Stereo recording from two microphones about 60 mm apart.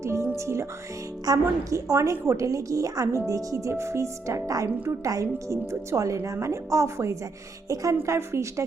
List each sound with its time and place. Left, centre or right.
0.0 s music: right
0.3 s speech: right
1.2 s a woman's voice: right
7.7 s a woman's voice: right
8.0 s speech: right